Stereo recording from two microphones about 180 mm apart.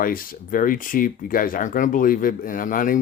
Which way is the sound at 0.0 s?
50° left (ahead or behind).